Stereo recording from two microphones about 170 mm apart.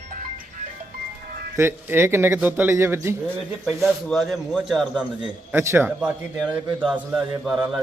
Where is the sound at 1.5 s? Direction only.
15° right (ahead or behind).